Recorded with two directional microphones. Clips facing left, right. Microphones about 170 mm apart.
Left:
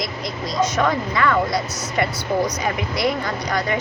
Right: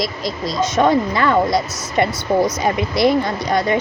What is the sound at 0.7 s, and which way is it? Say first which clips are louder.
Speech: right 5 dB; 25° right (ahead or behind).